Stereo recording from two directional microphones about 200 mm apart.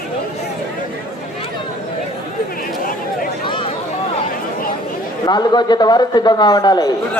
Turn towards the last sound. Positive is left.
turn(degrees=20)  # may be behind; listen again after turning